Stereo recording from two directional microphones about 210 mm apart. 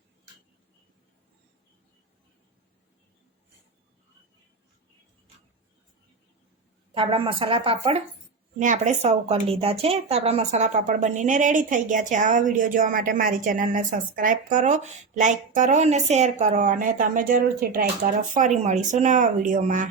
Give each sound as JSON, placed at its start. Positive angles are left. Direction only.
{"t": 6.9, "sound": "speech", "side_deg": -25}
{"t": 8.5, "sound": "speech", "side_deg": -35}